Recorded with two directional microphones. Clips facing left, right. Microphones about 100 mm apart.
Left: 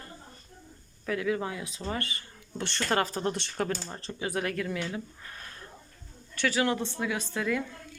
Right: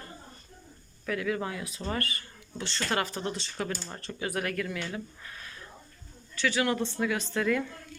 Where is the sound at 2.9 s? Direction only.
40° left (ahead or behind).